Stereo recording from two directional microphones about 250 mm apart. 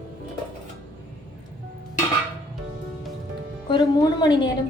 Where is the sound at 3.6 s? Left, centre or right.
Centre.